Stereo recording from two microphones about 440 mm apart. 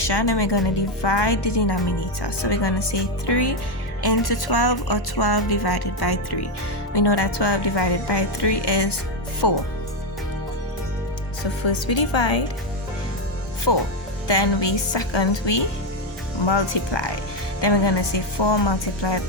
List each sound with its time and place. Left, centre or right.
0.0 s speech: left
11.6 s a woman's voice: left
13.7 s speech: left